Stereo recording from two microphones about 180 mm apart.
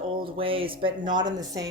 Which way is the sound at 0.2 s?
30° right (ahead or behind).